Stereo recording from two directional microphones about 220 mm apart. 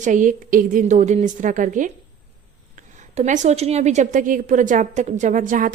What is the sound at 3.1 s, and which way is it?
A woman's voice, 35° right (ahead or behind).